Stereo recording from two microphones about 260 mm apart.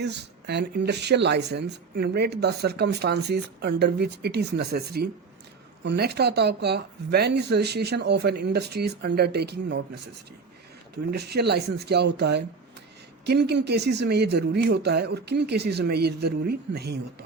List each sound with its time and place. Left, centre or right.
0.0 s speech: right
10.9 s speech: right